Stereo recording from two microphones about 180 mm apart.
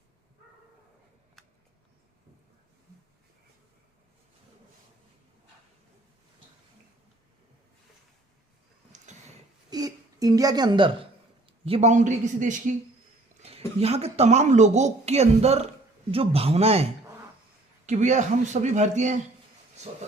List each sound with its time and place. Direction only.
9.6 s a sound: 20° right (ahead or behind)
11.4 s speech: 30° right (ahead or behind)
13.7 s speech: 35° right (ahead or behind)
17.8 s speech: 40° right (ahead or behind)